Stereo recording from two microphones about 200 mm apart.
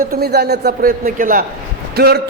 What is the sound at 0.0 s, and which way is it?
A man's voice, 50° right (ahead or behind).